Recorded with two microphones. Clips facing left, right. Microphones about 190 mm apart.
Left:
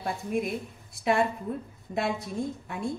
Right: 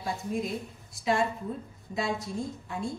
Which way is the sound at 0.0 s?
60° left (ahead or behind).